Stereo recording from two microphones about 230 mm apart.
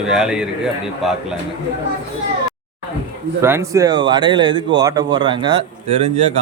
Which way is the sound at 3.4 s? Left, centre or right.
Centre.